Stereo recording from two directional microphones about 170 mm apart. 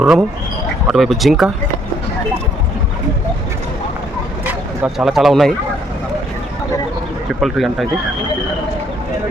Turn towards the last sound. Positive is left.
turn(degrees=0)  # may be behind; listen again after turning